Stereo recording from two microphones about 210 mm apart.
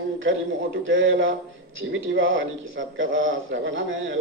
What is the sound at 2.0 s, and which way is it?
A man's voice, 70° right (ahead or behind).